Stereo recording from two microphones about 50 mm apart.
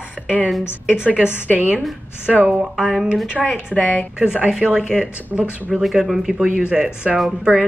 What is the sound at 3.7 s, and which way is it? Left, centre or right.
Speech, left.